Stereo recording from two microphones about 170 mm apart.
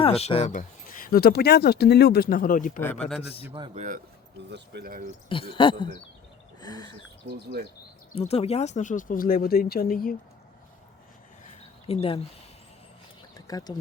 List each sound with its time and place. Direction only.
0.0 s speech: 35° left (ahead or behind)
2.8 s a man's voice: 10° left (ahead or behind)
3.8 s speech: 50° right (ahead or behind)
4.4 s speech: 80° right; by 5.0 s 60° right (ahead or behind)
5.3 s speech: 30° left (ahead or behind)
8.3 s speech: 35° left (ahead or behind); by 10.2 s 60° left (ahead or behind)
11.9 s speech: 35° left (ahead or behind)
13.3 s bird: 20° left (ahead or behind)